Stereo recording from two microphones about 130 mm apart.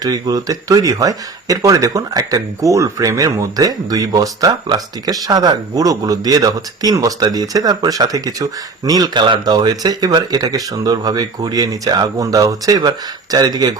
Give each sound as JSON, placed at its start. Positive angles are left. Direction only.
{"t": 0.0, "sound": "speech", "side_deg": -30}